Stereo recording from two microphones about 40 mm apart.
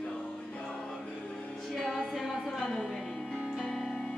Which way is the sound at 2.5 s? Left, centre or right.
Centre.